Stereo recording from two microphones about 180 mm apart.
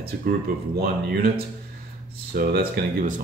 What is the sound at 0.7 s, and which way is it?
Speech, 60° right (ahead or behind).